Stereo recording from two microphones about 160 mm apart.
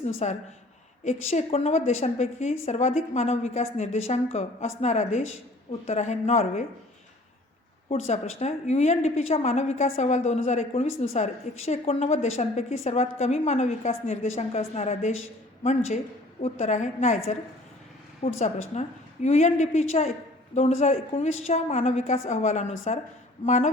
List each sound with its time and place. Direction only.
0.2 s a woman's voice: 45° left (ahead or behind)
7.9 s a woman's voice: 45° left (ahead or behind)
18.2 s a woman's voice: 45° left (ahead or behind)